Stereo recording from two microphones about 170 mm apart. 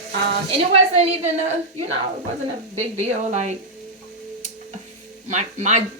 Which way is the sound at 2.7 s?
40° right (ahead or behind).